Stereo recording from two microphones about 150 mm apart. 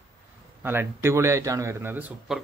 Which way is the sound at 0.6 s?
15° right (ahead or behind).